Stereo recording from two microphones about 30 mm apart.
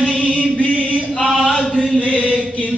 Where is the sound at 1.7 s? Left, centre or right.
Left.